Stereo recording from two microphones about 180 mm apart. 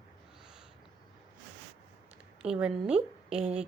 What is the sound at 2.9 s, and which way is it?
Speech, 35° right (ahead or behind).